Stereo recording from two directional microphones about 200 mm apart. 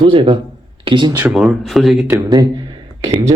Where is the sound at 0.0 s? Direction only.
25° right (ahead or behind).